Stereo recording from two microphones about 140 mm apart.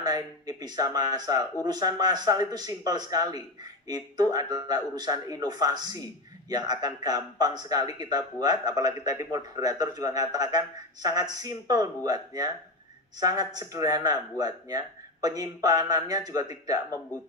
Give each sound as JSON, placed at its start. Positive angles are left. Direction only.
{"t": 0.0, "sound": "a man's voice", "side_deg": -30}